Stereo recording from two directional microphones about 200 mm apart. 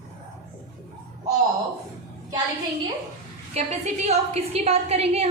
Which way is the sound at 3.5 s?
30° right (ahead or behind).